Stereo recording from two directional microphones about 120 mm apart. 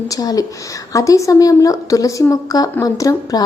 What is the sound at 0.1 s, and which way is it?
A woman's voice, 30° left (ahead or behind).